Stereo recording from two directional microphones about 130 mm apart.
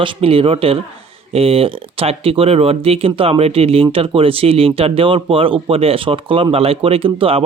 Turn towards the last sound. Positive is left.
turn(degrees=-45)  # may be behind; listen again after turning